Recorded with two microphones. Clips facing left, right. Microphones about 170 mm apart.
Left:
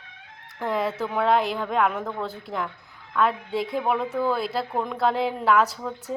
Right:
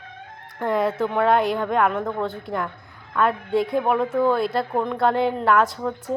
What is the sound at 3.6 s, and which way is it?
Speech, 55° right (ahead or behind).